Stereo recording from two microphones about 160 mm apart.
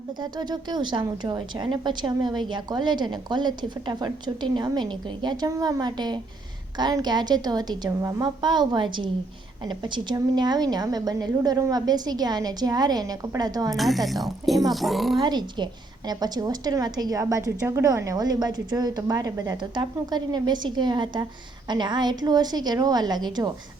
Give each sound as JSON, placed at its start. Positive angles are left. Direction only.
{"t": 0.2, "sound": "a woman's voice", "side_deg": -25}
{"t": 13.7, "sound": "speech", "side_deg": 0}
{"t": 15.2, "sound": "a woman's voice", "side_deg": -25}